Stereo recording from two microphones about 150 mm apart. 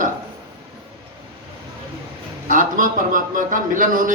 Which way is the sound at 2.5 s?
65° right (ahead or behind).